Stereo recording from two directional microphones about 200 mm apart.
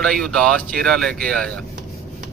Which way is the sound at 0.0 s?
Centre (ahead or behind).